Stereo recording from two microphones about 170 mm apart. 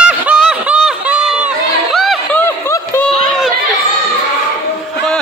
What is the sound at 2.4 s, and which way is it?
Chatter, 15° left (ahead or behind).